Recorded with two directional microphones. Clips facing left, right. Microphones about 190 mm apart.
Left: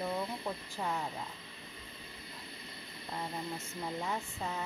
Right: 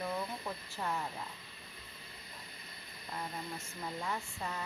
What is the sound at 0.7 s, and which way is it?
Speech, 15° left (ahead or behind).